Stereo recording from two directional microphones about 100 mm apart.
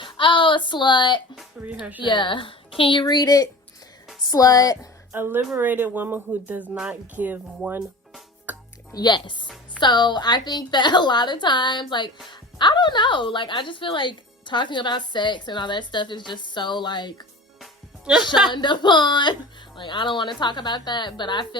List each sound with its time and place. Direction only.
0.0 s speech: 55° left (ahead or behind)
1.6 s speech: 10° right (ahead or behind)
2.0 s a woman's voice: 55° left (ahead or behind); by 4.9 s 35° left (ahead or behind)
5.1 s a woman's voice: 25° right (ahead or behind)
8.9 s a woman's voice: 45° left (ahead or behind)
17.6 s music: 5° right (ahead or behind)
18.5 s a woman's voice: 50° left (ahead or behind)